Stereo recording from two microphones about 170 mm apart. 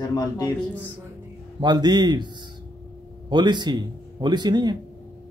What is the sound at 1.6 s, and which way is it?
Speech, 25° right (ahead or behind).